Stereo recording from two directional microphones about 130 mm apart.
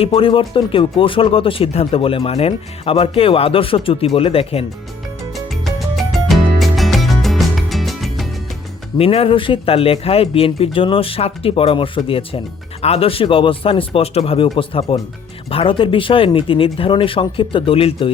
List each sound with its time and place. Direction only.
0.0 s speech: 45° left (ahead or behind)
5.3 s music: centre (ahead or behind)
9.0 s speech: 45° left (ahead or behind)